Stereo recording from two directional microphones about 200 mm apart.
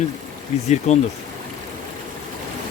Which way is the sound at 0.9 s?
35° left (ahead or behind).